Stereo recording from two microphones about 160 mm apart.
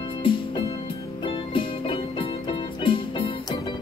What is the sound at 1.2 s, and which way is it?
Music, 30° left (ahead or behind).